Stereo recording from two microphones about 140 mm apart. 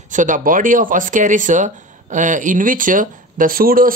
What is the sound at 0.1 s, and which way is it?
Speech, 65° right (ahead or behind).